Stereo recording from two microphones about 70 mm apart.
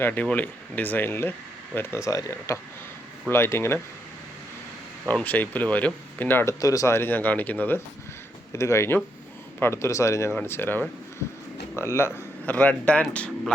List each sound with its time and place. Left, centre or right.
0.0 s speech: left
2.0 s speech: left
3.2 s speech: left
5.2 s speech: left
6.4 s speech: left
6.9 s speech: left
8.5 s speech: left
10.4 s speech: left
12.5 s speech: left